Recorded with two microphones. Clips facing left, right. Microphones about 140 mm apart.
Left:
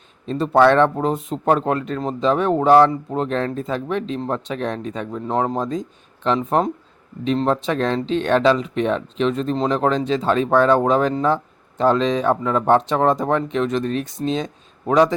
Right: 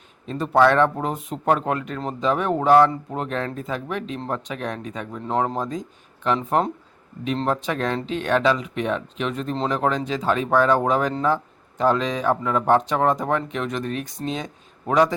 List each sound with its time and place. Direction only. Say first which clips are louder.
0.3 s speech: left 3 dB; 25° left (ahead or behind)